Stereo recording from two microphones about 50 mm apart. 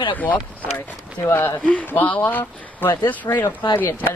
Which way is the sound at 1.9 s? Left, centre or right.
Left.